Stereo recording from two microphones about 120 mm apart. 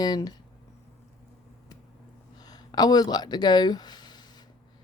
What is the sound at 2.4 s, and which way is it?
Speech, 35° left (ahead or behind).